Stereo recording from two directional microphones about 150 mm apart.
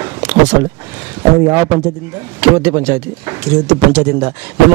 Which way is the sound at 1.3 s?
25° right (ahead or behind).